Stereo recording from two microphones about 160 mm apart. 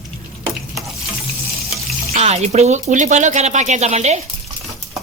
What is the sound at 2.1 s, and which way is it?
Speech, 40° right (ahead or behind).